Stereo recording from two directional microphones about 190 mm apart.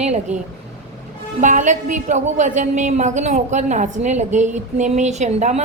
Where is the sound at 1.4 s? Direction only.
40° right (ahead or behind).